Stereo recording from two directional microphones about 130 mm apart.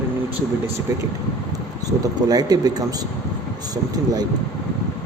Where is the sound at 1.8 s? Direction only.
30° right (ahead or behind).